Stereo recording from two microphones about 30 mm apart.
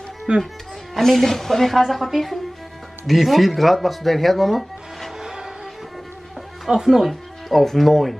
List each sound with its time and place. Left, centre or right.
0.3 s speech: right
0.9 s speech: centre
5.2 s music: centre
6.7 s speech: centre
7.1 s music: centre
7.6 s speech: centre